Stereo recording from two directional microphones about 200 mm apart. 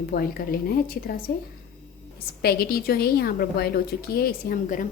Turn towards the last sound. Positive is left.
turn(degrees=45)  # may be behind; listen again after turning